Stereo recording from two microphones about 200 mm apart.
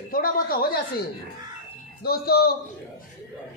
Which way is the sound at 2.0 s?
50° left (ahead or behind).